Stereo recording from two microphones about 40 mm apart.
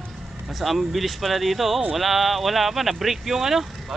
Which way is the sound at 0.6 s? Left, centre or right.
Centre.